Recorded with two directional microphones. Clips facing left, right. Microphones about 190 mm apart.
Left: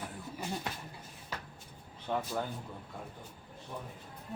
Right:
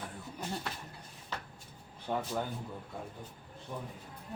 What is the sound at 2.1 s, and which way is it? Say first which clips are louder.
Speech: even; 10° right (ahead or behind).